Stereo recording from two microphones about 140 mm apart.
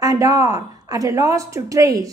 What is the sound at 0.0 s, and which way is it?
A woman's voice, 25° right (ahead or behind).